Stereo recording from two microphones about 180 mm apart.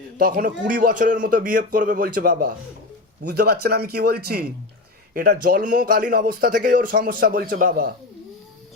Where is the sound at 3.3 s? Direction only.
65° right (ahead or behind).